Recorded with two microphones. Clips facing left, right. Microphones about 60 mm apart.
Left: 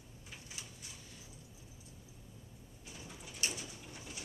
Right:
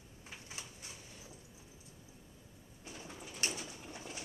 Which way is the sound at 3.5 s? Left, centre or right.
Right.